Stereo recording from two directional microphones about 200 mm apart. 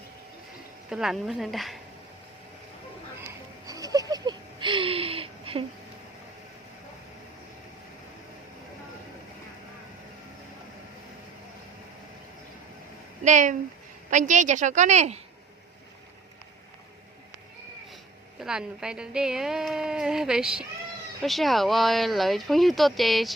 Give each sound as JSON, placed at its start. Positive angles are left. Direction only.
{"t": 0.9, "sound": "a woman's voice", "side_deg": -5}
{"t": 3.7, "sound": "a sound", "side_deg": -20}
{"t": 13.2, "sound": "a woman's voice", "side_deg": -40}
{"t": 18.3, "sound": "a woman's voice", "side_deg": -5}